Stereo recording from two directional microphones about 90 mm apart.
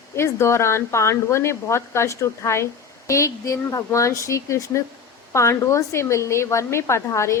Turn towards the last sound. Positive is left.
turn(degrees=30)  # may be behind; listen again after turning